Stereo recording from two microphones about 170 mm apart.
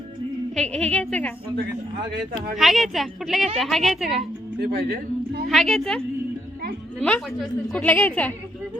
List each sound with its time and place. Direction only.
0.5 s a woman's voice: 5° left (ahead or behind)
2.6 s a woman's voice: centre (ahead or behind)
4.6 s a man's voice: 70° right (ahead or behind)
5.5 s a woman's voice: centre (ahead or behind)
7.0 s a woman's voice: 5° left (ahead or behind)